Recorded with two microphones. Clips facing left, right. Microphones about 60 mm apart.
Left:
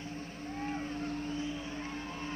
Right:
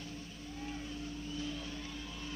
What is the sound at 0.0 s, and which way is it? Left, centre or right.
Vehicle, left.